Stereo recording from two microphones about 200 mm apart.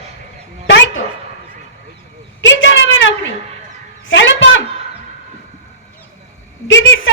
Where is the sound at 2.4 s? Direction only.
65° left (ahead or behind).